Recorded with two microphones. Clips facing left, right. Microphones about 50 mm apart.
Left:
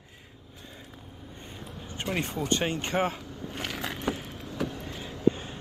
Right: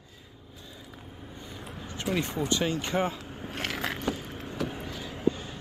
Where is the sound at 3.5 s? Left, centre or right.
Centre.